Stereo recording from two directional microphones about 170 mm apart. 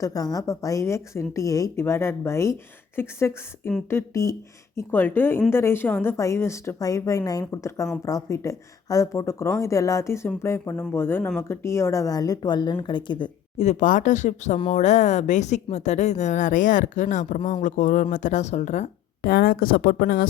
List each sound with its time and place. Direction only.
0.0 s a woman's voice: 20° left (ahead or behind)
13.6 s speech: 45° left (ahead or behind)
19.2 s speech: 60° left (ahead or behind)